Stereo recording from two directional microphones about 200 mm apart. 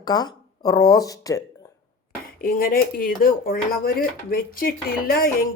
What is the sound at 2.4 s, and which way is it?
Speech, 45° left (ahead or behind).